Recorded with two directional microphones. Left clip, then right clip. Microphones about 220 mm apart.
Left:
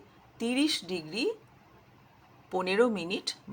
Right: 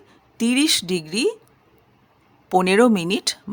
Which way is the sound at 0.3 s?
50° right (ahead or behind).